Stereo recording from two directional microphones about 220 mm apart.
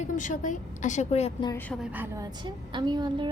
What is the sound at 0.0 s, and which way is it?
A woman's voice, 35° left (ahead or behind).